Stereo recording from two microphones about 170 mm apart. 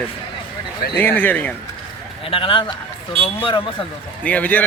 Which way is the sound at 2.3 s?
30° left (ahead or behind).